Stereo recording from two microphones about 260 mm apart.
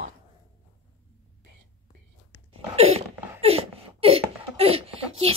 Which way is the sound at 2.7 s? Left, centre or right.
Right.